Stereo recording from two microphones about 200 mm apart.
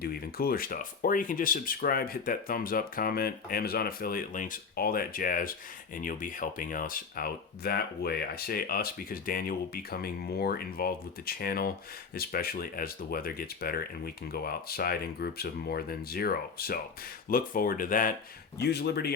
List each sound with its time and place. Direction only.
0.0 s speech: 50° left (ahead or behind)
18.6 s speech: 55° left (ahead or behind)